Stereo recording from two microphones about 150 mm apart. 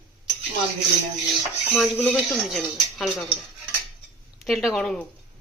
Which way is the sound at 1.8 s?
Centre (ahead or behind).